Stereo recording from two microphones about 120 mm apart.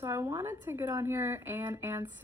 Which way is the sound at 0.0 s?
20° right (ahead or behind).